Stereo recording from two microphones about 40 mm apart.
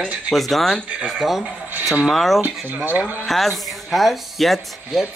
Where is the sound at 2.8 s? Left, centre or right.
Right.